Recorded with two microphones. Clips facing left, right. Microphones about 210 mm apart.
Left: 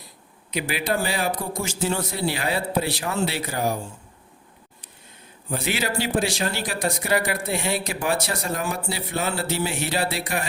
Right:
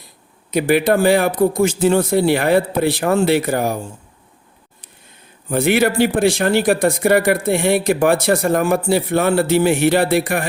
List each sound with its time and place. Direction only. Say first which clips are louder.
0.5 s speech: right 11 dB; 55° right (ahead or behind)
5.5 s speech: right 11 dB; 55° right (ahead or behind)